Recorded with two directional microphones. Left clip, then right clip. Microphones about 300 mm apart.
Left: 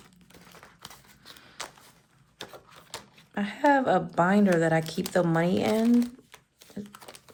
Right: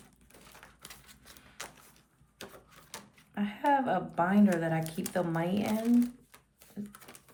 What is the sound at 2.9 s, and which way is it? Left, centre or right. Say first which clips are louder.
Speech: left 7 dB; centre.